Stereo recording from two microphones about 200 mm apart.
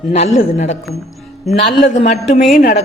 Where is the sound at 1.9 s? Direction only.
30° left (ahead or behind).